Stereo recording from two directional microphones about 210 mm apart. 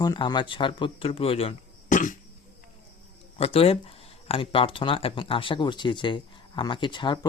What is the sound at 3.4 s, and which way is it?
Speech, 25° left (ahead or behind).